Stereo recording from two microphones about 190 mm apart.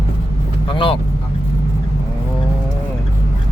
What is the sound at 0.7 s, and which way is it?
Vehicle, 25° left (ahead or behind).